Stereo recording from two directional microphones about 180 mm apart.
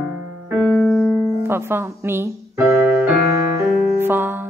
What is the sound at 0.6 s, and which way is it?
Music, 10° left (ahead or behind).